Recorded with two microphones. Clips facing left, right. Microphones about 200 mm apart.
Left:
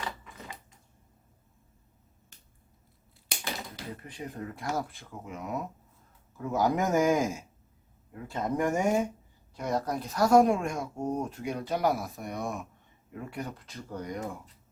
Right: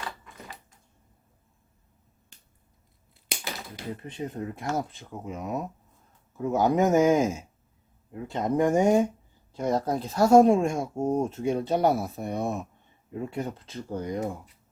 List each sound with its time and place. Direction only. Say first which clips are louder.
4.0 s speech: right 6 dB; 25° right (ahead or behind)